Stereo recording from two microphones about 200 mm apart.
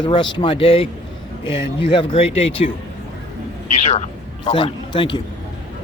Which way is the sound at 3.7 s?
35° left (ahead or behind).